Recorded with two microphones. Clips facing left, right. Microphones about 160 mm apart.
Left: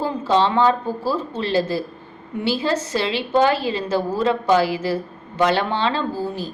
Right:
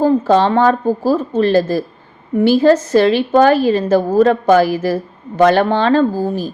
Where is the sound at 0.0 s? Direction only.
50° right (ahead or behind).